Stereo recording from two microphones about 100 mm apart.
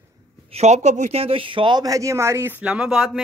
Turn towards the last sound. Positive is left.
turn(degrees=-5)  # may be behind; listen again after turning